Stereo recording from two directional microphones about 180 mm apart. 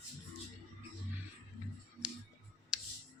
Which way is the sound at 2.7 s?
5° right (ahead or behind).